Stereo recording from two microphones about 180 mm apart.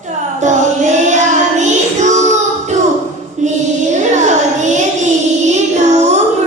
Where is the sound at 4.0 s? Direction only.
40° right (ahead or behind).